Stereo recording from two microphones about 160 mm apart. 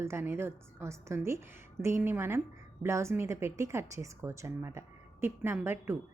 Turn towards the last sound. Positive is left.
turn(degrees=-15)  # may be behind; listen again after turning